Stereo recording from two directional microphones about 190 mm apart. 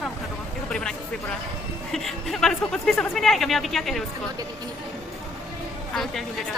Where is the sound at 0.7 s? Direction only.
5° left (ahead or behind).